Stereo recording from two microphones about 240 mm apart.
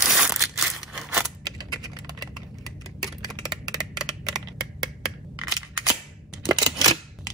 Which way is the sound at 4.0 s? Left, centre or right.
Centre.